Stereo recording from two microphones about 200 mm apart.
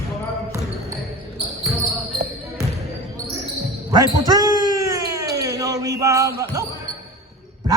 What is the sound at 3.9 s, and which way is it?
Basketball bounce, 20° right (ahead or behind).